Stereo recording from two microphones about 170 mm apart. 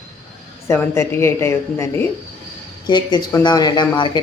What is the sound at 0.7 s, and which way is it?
Speech, 15° left (ahead or behind).